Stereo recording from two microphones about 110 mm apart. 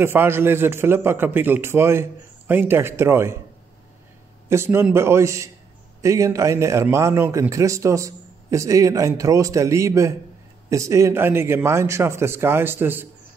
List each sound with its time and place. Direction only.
0.0 s a man's voice: 20° right (ahead or behind)
4.5 s a man's voice: 25° right (ahead or behind)